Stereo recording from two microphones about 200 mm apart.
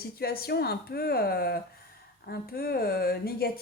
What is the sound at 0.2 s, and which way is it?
A woman's voice, 50° left (ahead or behind).